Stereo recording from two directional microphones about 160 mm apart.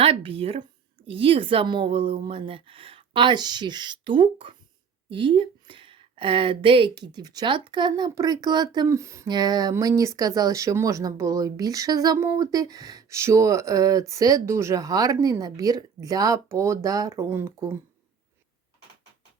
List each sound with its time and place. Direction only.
0.0 s speech: 35° right (ahead or behind); by 17.7 s 15° right (ahead or behind)